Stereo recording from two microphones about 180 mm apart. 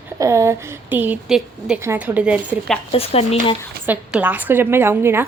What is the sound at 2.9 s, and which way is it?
Speech, 35° left (ahead or behind).